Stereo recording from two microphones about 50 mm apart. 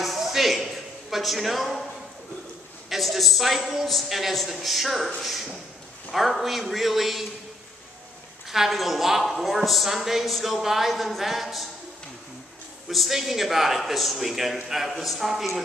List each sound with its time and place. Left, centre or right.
0.0 s a sound: centre
2.9 s a woman's voice: centre
8.5 s a woman's voice: centre
12.8 s a woman's voice: centre